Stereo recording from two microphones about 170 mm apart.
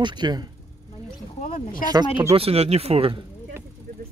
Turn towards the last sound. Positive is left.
turn(degrees=-35)  # may be behind; listen again after turning